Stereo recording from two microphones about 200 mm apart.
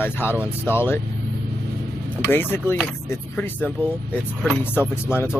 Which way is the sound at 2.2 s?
10° left (ahead or behind).